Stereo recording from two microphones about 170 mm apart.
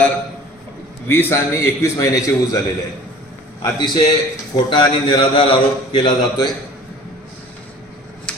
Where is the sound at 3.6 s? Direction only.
25° left (ahead or behind).